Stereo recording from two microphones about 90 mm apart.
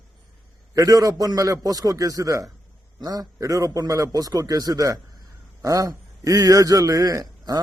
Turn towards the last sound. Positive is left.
turn(degrees=-40)  # may be behind; listen again after turning